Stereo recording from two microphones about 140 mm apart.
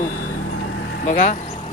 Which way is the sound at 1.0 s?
60° left (ahead or behind).